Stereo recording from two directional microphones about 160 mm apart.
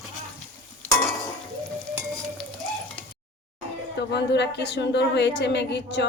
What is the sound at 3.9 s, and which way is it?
A woman's voice, 90° left.